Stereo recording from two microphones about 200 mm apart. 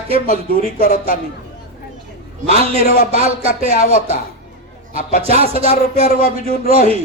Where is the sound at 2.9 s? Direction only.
45° left (ahead or behind).